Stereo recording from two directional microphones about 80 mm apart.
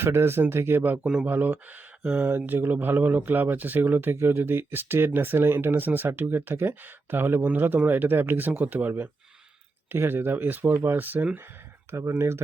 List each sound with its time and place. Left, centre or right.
0.0 s speech: right
1.0 s a man's voice: centre
1.3 s speech: right
11.9 s speech: right